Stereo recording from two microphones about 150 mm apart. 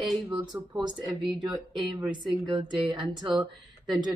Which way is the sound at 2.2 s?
30° right (ahead or behind).